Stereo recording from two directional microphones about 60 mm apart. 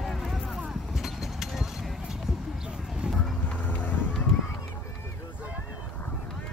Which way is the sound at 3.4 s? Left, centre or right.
Left.